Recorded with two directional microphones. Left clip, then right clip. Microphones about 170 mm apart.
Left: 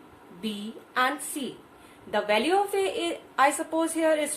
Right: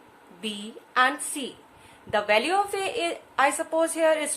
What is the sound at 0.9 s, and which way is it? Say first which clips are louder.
A woman's voice: right 3 dB; 30° right (ahead or behind).